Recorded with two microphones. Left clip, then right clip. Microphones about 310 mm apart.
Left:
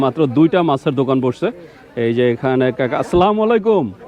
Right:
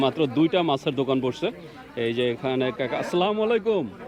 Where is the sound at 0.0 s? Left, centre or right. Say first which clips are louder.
Left 8 dB; left.